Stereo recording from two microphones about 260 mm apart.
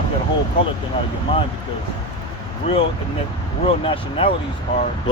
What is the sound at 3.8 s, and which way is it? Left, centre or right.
Speech, centre.